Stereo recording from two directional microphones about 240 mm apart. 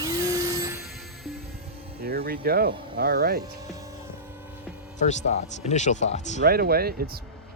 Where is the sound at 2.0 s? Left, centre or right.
Right.